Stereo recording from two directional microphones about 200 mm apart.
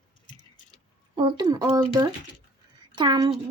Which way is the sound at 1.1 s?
20° right (ahead or behind).